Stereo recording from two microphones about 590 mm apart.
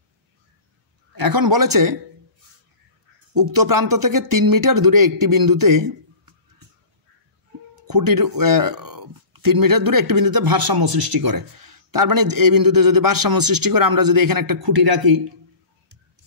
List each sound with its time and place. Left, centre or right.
1.2 s speech: right
3.3 s speech: right
7.8 s speech: right